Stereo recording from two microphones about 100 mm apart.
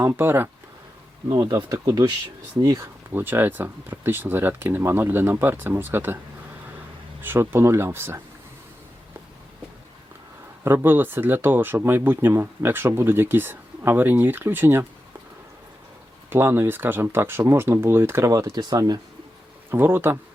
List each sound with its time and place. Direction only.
0.0 s speech: 25° right (ahead or behind)
1.3 s speech: 45° right (ahead or behind)
2.8 s speech: 20° right (ahead or behind)
7.2 s speech: 20° right (ahead or behind)
10.6 s speech: 20° right (ahead or behind)
16.3 s speech: 20° right (ahead or behind); by 18.9 s 40° right (ahead or behind)
19.7 s speech: 20° right (ahead or behind)